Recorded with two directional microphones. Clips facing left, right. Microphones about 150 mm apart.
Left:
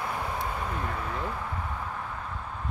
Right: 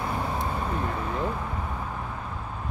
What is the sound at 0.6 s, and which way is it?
Vehicle, 25° right (ahead or behind).